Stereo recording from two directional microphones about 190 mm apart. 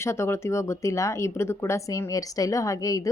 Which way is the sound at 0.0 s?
15° left (ahead or behind).